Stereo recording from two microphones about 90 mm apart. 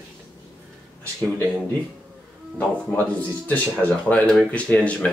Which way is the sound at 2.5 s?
20° left (ahead or behind).